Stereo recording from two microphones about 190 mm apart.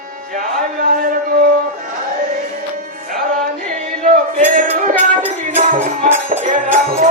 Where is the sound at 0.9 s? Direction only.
45° right (ahead or behind).